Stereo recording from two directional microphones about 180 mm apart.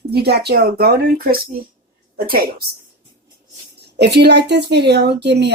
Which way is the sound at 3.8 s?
65° right (ahead or behind).